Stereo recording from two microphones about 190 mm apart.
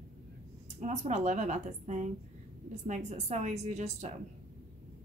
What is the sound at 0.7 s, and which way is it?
A woman's voice, 40° right (ahead or behind).